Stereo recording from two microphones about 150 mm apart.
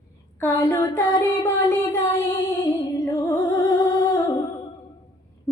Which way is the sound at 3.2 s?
25° left (ahead or behind).